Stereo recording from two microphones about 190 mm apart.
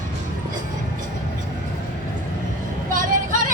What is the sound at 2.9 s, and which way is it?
Vehicle, 45° right (ahead or behind).